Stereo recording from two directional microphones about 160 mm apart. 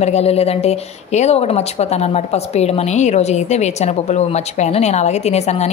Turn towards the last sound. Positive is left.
turn(degrees=45)  # may be behind; listen again after turning